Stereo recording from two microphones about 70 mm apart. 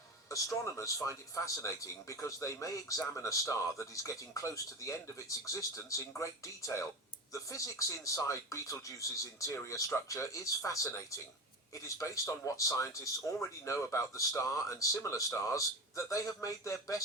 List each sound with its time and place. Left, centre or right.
0.3 s speech: left